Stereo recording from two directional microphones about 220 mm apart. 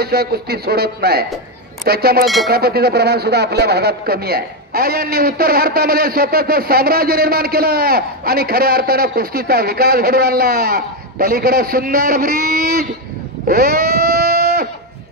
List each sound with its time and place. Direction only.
0.0 s speech: 45° right (ahead or behind)
2.2 s speech: centre (ahead or behind)
2.5 s speech: 45° right (ahead or behind)
13.5 s a sound: 45° right (ahead or behind)